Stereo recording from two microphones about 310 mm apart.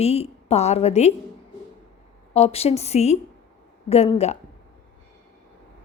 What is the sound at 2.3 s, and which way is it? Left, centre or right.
A woman's voice, centre.